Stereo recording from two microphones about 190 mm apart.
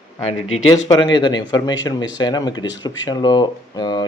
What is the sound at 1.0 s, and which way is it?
Speech, 25° left (ahead or behind).